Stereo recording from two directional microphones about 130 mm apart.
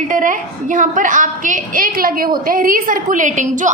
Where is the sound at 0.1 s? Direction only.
85° right.